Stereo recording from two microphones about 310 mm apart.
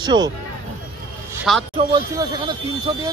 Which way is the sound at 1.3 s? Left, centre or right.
Centre.